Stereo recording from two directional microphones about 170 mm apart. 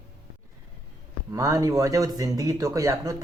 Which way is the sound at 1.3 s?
20° right (ahead or behind).